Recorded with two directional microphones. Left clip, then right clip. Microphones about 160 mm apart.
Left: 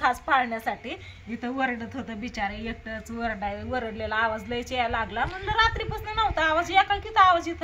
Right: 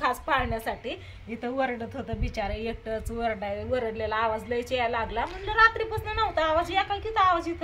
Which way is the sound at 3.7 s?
10° right (ahead or behind).